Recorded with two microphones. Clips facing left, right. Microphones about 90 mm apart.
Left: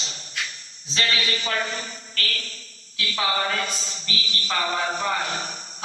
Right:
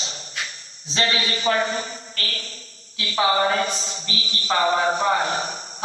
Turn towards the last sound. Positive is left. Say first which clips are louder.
# right 5 dB
turn(degrees=-25)  # may be behind; listen again after turning